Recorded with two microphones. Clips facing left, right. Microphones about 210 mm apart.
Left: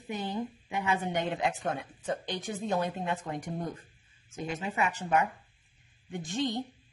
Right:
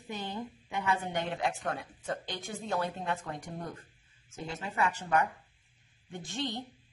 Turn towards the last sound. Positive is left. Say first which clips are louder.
# left 5 dB
turn(degrees=15)  # may be behind; listen again after turning